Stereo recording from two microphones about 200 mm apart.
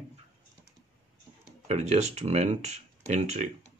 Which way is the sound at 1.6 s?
35° right (ahead or behind).